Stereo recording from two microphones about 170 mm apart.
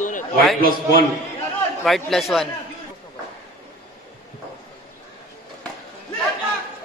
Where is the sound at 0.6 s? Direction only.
60° right (ahead or behind).